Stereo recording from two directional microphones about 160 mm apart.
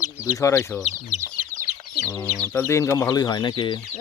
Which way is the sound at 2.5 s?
15° left (ahead or behind).